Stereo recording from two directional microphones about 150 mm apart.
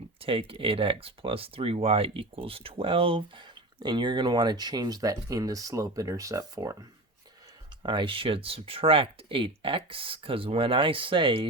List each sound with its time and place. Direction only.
0.2 s speech: 35° right (ahead or behind); by 6.7 s 20° right (ahead or behind)
7.8 s speech: 30° right (ahead or behind)